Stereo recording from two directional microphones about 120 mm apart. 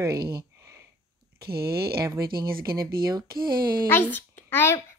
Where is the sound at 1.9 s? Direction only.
25° right (ahead or behind).